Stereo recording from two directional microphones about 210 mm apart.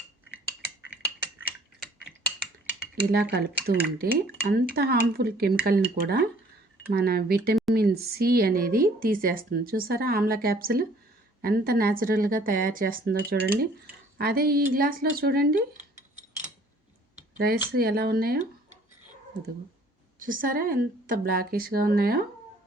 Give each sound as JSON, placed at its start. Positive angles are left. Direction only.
{"t": 2.9, "sound": "speech", "side_deg": -50}
{"t": 17.3, "sound": "speech", "side_deg": -45}
{"t": 20.1, "sound": "speech", "side_deg": -40}